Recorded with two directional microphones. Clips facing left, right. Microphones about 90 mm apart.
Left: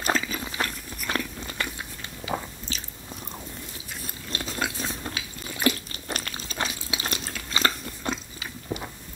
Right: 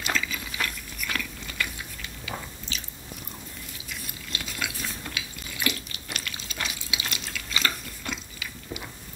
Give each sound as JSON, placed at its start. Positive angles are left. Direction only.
{"t": 0.0, "sound": "a sound", "side_deg": 35}
{"t": 2.2, "sound": "biting", "side_deg": 30}
{"t": 3.9, "sound": "biting", "side_deg": 35}